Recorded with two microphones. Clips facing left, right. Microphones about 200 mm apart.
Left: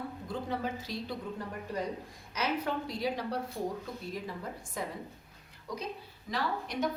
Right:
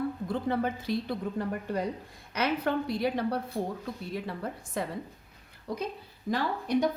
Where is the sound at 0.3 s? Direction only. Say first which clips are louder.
Right 3 dB; 55° right (ahead or behind).